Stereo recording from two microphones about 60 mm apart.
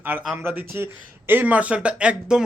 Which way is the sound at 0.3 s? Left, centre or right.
Right.